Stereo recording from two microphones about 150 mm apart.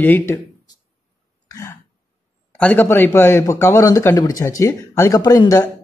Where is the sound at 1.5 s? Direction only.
20° left (ahead or behind).